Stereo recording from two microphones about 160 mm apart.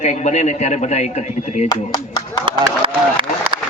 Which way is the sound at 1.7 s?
25° left (ahead or behind).